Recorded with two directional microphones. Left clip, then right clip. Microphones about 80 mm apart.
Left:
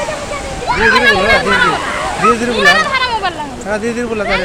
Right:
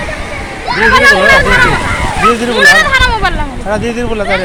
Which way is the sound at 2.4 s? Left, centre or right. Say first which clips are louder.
Right 4 dB; centre.